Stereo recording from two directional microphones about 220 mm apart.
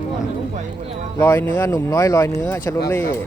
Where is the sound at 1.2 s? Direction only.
10° left (ahead or behind).